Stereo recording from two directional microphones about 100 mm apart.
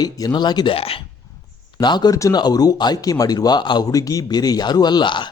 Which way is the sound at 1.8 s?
45° left (ahead or behind).